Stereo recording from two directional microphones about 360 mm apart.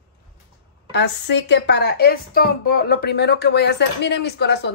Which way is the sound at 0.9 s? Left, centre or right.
Left.